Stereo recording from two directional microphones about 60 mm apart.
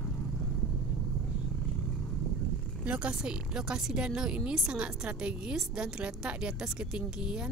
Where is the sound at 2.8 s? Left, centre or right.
Right.